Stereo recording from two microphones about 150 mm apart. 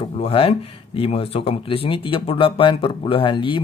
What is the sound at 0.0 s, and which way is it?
Speech, 40° left (ahead or behind).